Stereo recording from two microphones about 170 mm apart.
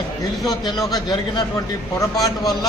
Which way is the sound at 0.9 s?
25° left (ahead or behind).